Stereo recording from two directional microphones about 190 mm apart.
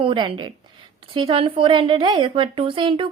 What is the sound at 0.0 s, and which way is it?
A woman's voice, 25° right (ahead or behind).